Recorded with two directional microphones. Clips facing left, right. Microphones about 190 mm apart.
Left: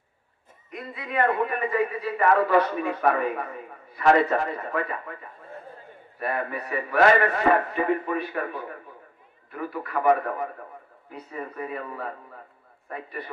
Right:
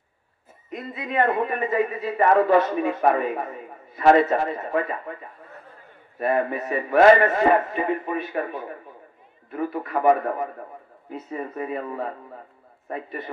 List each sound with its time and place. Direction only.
0.7 s a man's voice: 25° right (ahead or behind)
6.1 s a man's voice: 25° right (ahead or behind)